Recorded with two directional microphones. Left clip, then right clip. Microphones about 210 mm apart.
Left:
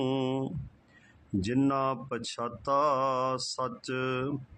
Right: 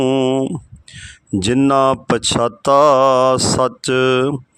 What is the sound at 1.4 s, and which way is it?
Speech, 50° right (ahead or behind).